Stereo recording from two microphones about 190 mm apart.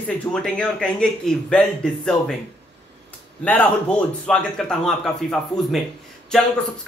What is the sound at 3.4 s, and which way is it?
Speech, 5° left (ahead or behind).